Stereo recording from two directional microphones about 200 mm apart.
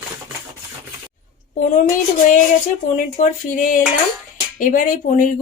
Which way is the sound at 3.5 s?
40° left (ahead or behind).